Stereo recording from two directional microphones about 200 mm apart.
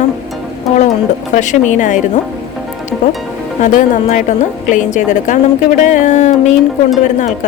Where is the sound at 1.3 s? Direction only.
40° left (ahead or behind).